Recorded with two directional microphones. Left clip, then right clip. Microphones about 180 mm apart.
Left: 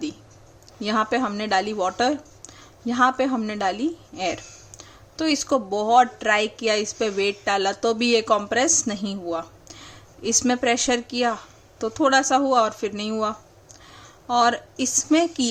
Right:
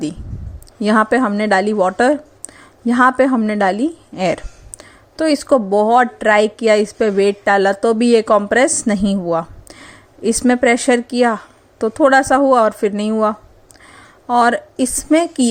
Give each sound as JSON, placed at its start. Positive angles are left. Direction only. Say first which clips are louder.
{"t": 0.8, "sound": "speech", "louder": "right 9 dB", "side_deg": -35}